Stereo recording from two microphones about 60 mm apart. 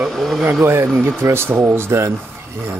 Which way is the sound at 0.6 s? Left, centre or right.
Right.